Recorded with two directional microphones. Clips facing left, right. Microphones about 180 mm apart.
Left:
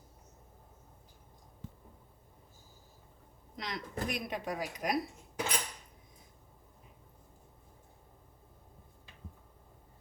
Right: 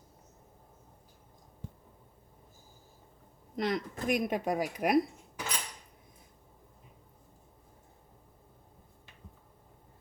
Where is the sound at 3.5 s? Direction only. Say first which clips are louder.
Right 8 dB; 50° right (ahead or behind).